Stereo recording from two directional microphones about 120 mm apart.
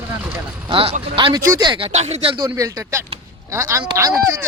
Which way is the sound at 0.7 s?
50° right (ahead or behind).